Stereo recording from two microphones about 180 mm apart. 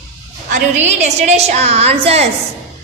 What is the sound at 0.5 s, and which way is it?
A woman's voice, 40° right (ahead or behind).